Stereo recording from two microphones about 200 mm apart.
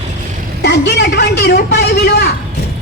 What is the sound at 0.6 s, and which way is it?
Speech, 55° left (ahead or behind).